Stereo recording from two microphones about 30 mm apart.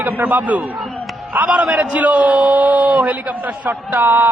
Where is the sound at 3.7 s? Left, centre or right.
Right.